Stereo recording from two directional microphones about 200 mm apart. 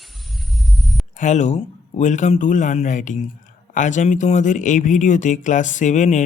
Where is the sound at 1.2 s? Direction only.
35° left (ahead or behind).